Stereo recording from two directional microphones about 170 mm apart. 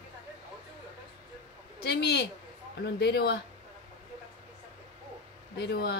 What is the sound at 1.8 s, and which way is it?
Speech, 70° left (ahead or behind).